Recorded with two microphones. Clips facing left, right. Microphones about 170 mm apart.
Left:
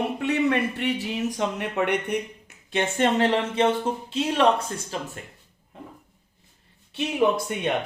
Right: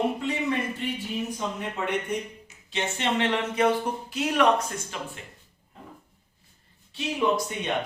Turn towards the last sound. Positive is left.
turn(degrees=60)  # may be behind; listen again after turning